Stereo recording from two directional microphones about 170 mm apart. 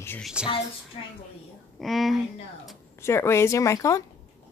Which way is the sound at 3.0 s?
15° left (ahead or behind).